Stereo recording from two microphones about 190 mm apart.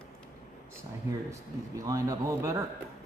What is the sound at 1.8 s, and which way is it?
Speech, 15° right (ahead or behind).